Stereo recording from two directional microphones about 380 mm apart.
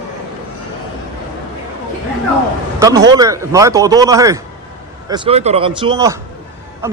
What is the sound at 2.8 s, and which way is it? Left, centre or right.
A man's voice, centre.